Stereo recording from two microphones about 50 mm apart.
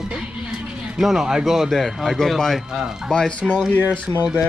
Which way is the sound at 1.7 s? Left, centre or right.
Centre.